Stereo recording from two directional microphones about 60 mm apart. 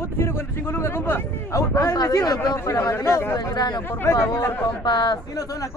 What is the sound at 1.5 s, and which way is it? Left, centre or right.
A man's voice, left.